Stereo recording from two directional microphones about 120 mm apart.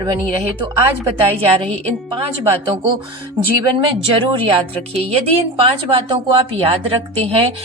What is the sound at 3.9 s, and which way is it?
A woman's voice, 45° right (ahead or behind).